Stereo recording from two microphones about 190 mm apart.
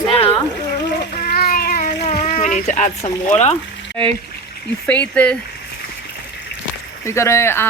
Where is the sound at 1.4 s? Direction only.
50° left (ahead or behind).